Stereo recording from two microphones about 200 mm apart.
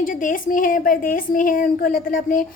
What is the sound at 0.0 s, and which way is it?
Speech, 40° left (ahead or behind).